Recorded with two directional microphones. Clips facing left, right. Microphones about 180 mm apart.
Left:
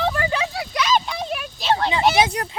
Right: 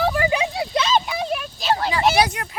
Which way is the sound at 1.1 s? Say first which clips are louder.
Right 2 dB; centre (ahead or behind).